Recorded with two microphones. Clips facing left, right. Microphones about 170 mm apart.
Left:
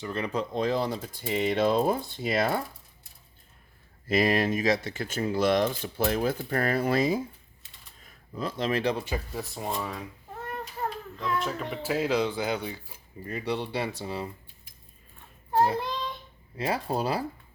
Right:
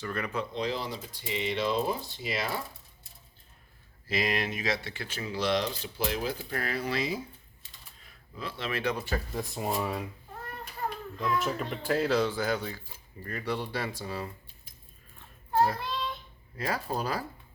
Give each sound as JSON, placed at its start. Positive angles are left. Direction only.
{"t": 0.0, "sound": "speech", "side_deg": 25}
{"t": 0.3, "sound": "speech", "side_deg": 50}
{"t": 4.1, "sound": "speech", "side_deg": 45}
{"t": 9.3, "sound": "speech", "side_deg": 0}
{"t": 11.2, "sound": "speech", "side_deg": -5}
{"t": 11.8, "sound": "speech", "side_deg": 10}
{"t": 15.5, "sound": "child singing", "side_deg": 20}
{"t": 16.6, "sound": "speech", "side_deg": 25}